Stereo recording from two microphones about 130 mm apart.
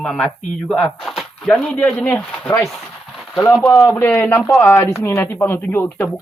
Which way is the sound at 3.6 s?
20° left (ahead or behind).